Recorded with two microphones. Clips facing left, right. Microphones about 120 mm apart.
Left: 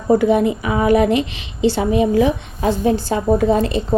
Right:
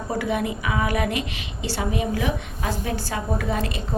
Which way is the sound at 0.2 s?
30° left (ahead or behind).